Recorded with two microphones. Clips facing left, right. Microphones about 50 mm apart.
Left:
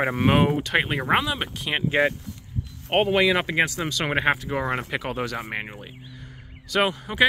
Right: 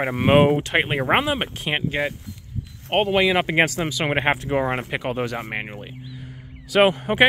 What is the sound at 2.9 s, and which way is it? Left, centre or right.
Speech, centre.